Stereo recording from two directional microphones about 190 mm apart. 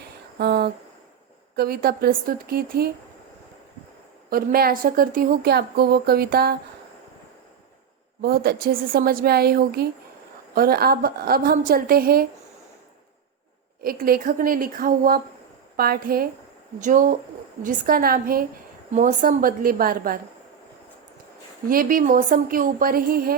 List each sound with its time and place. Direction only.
0.3 s a sound: 60° right (ahead or behind)
1.5 s a woman's voice: 50° right (ahead or behind)
4.3 s a woman's voice: 50° right (ahead or behind)
8.2 s a woman's voice: 55° right (ahead or behind)
13.8 s a woman's voice: 50° right (ahead or behind)
21.7 s a woman's voice: 45° right (ahead or behind)